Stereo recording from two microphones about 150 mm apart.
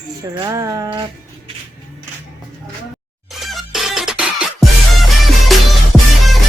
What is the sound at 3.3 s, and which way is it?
Music, centre (ahead or behind).